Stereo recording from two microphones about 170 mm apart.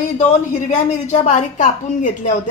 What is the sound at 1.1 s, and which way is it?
Speech, 45° left (ahead or behind).